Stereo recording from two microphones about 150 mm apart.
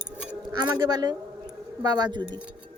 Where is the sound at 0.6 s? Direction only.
30° right (ahead or behind).